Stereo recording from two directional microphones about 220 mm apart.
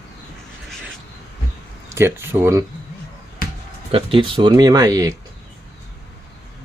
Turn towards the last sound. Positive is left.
turn(degrees=-15)  # may be behind; listen again after turning